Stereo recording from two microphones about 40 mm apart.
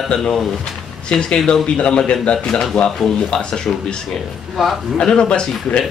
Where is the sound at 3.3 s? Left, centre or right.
Centre.